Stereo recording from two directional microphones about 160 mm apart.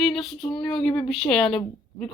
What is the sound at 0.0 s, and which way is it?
Speech, centre (ahead or behind).